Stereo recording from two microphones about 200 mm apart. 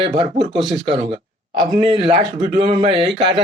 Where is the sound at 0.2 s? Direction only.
25° right (ahead or behind).